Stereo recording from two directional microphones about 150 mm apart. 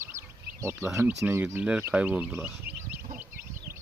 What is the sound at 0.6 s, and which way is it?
Speech, 15° right (ahead or behind).